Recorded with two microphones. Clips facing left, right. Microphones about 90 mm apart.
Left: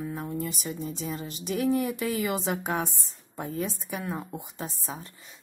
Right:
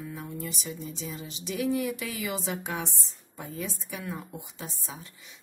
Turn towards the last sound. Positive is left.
turn(degrees=40)  # may be behind; listen again after turning